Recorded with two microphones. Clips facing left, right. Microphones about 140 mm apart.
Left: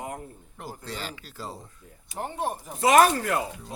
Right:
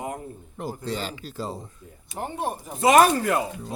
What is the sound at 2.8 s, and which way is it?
Speech, 15° right (ahead or behind).